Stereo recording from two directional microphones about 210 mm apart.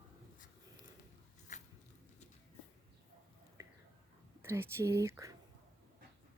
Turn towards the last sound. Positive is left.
turn(degrees=-15)  # may be behind; listen again after turning